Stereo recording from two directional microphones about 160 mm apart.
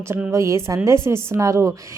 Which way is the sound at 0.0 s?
15° right (ahead or behind).